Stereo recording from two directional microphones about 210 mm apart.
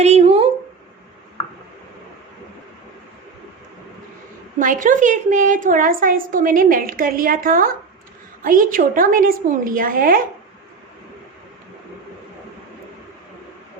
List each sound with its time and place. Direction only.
0.0 s a woman's voice: 30° right (ahead or behind)
4.6 s a woman's voice: 40° right (ahead or behind)